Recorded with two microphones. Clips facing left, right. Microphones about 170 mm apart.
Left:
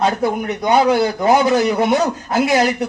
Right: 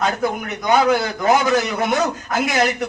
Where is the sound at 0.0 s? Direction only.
30° left (ahead or behind).